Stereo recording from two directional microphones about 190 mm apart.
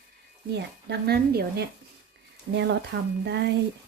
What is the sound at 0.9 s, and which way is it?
Speech, 55° right (ahead or behind).